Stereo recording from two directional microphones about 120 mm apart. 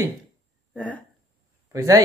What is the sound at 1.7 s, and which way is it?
Speech, 25° right (ahead or behind).